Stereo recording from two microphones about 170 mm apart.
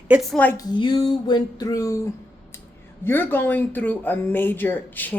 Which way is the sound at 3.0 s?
15° left (ahead or behind).